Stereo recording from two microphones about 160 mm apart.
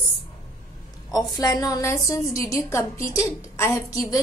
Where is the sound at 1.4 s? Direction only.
20° left (ahead or behind).